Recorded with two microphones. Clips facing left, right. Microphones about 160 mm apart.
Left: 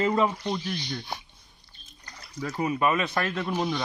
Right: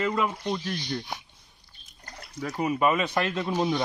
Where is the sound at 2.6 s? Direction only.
10° right (ahead or behind).